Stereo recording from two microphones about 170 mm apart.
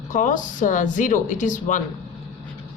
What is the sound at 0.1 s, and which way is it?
Speech, 50° left (ahead or behind).